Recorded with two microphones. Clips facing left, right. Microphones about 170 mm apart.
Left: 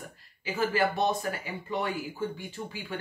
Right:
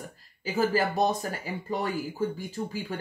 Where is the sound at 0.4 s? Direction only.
40° right (ahead or behind).